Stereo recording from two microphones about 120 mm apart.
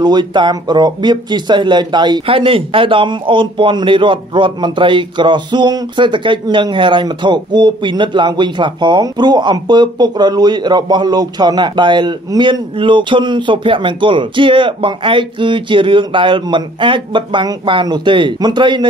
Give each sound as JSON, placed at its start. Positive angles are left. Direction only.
{"t": 0.0, "sound": "speech", "side_deg": -40}